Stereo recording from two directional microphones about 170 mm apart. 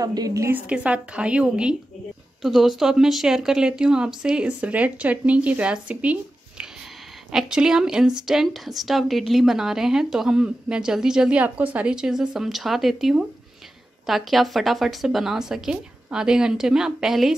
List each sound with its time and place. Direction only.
0.0 s a woman's voice: 20° right (ahead or behind)
7.2 s a woman's voice: 5° right (ahead or behind)